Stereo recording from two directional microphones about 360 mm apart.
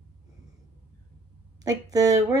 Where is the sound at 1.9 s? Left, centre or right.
Centre.